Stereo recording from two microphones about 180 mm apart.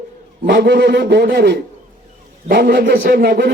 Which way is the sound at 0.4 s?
65° right (ahead or behind).